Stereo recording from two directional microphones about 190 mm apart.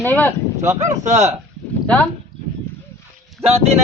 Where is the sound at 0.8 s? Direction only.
40° right (ahead or behind).